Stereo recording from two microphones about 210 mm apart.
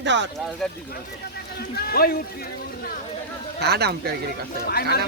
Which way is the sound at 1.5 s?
45° left (ahead or behind).